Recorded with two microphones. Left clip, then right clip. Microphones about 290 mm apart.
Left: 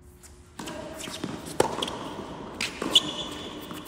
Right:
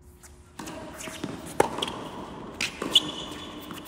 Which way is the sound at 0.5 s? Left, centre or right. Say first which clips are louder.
Left 2 dB; centre.